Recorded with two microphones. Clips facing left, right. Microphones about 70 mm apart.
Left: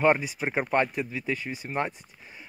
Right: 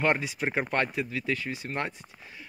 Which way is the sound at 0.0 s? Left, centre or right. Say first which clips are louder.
Left 3 dB; centre.